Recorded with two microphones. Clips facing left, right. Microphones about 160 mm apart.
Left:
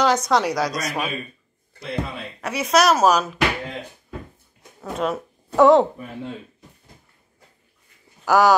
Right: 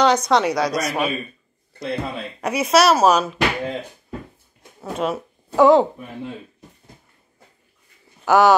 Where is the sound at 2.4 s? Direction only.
15° right (ahead or behind).